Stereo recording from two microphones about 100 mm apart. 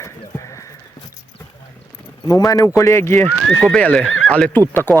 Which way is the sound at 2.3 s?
35° left (ahead or behind).